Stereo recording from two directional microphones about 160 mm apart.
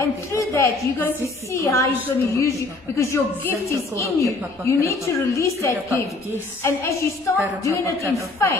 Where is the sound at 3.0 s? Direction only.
15° left (ahead or behind).